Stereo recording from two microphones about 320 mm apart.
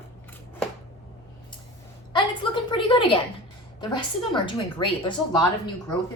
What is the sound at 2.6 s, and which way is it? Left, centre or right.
A woman's voice, centre.